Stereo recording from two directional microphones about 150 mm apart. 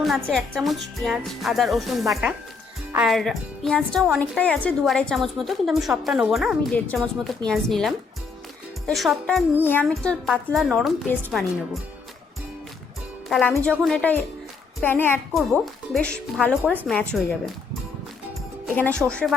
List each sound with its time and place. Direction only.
0.3 s a woman's voice: 5° left (ahead or behind)
9.6 s a woman's voice: 15° left (ahead or behind)
13.3 s speech: 5° left (ahead or behind)
15.3 s a woman's voice: centre (ahead or behind)
19.0 s a woman's voice: 5° right (ahead or behind)